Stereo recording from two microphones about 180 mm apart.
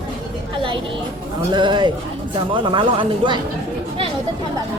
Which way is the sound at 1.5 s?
25° right (ahead or behind).